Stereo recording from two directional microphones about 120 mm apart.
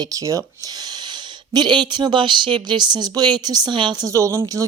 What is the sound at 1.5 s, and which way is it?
A woman's voice, 40° right (ahead or behind).